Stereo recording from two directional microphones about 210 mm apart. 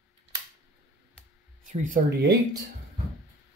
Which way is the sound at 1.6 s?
40° right (ahead or behind).